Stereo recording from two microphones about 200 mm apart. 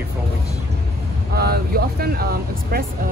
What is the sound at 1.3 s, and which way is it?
Speech, 50° right (ahead or behind).